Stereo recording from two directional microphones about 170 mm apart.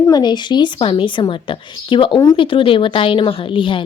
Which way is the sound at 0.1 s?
25° left (ahead or behind).